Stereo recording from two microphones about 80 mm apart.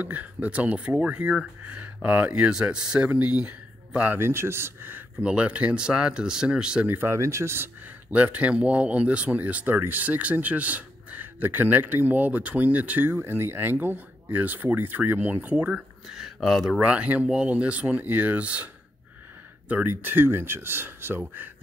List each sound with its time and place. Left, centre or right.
0.0 s speech: centre
5.2 s speech: centre
6.9 s speech: right
8.1 s speech: centre
16.1 s speech: centre
16.8 s speech: centre
19.7 s speech: right